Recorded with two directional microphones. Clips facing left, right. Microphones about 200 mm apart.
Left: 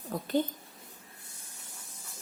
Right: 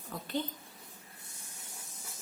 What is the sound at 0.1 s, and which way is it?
Speech, 45° left (ahead or behind).